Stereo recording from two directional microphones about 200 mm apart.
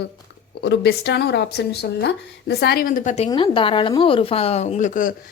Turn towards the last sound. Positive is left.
turn(degrees=40)  # may be behind; listen again after turning